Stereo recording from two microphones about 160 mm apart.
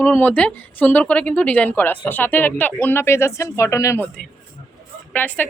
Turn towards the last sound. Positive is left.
turn(degrees=10)  # may be behind; listen again after turning